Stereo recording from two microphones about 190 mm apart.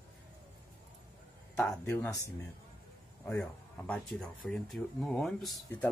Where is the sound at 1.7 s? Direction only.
10° left (ahead or behind).